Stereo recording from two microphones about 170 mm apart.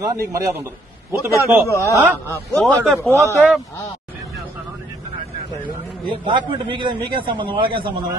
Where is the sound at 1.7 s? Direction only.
20° left (ahead or behind).